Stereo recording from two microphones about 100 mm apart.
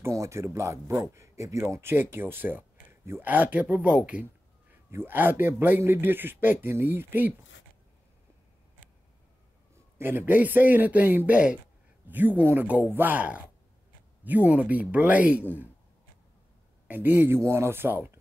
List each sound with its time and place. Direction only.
0.0 s speech: 30° right (ahead or behind)
9.9 s speech: 20° right (ahead or behind)
16.8 s speech: 20° right (ahead or behind)